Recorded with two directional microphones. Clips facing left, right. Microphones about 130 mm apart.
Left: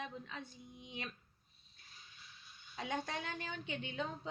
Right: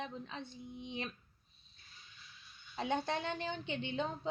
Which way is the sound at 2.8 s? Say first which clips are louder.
Right 5 dB; 30° right (ahead or behind).